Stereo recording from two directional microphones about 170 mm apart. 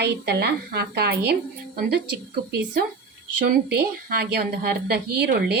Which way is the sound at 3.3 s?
65° right (ahead or behind).